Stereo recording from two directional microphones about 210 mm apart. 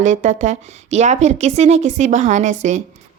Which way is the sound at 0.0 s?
35° right (ahead or behind).